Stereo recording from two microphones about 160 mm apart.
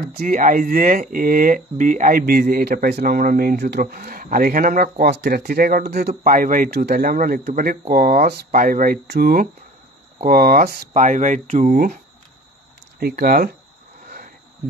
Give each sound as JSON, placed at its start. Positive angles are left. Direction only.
{"t": 0.1, "sound": "speech", "side_deg": -65}
{"t": 6.2, "sound": "speech", "side_deg": -55}
{"t": 10.2, "sound": "speech", "side_deg": -65}
{"t": 10.9, "sound": "speech", "side_deg": -50}
{"t": 13.0, "sound": "speech", "side_deg": -80}
{"t": 14.0, "sound": "cricket", "side_deg": -65}